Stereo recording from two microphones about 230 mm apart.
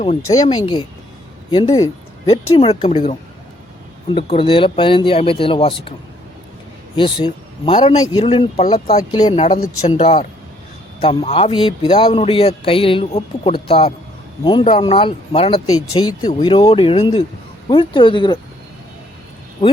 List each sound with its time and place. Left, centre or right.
0.3 s a man's voice: left
6.9 s a man's voice: left
19.6 s a man's voice: left